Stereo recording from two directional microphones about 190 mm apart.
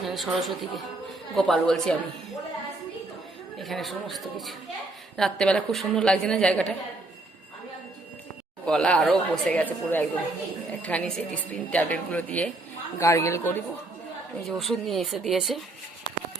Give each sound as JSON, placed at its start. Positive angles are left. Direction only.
{"t": 0.0, "sound": "a woman's voice", "side_deg": 0}
{"t": 3.6, "sound": "a woman's voice", "side_deg": 0}
{"t": 8.6, "sound": "a woman's voice", "side_deg": 5}
{"t": 14.4, "sound": "a woman's voice", "side_deg": 0}
{"t": 16.1, "sound": "a sound", "side_deg": 25}